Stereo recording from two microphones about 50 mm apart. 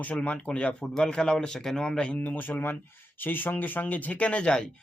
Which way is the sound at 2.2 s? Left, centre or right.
Left.